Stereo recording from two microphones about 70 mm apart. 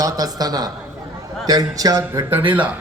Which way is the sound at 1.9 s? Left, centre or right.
Right.